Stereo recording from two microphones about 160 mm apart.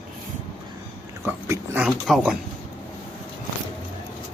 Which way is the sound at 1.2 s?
15° right (ahead or behind).